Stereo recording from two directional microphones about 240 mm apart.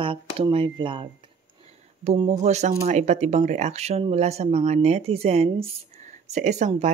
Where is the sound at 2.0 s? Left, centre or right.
Right.